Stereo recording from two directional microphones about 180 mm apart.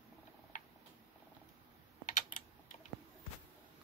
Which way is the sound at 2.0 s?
45° left (ahead or behind).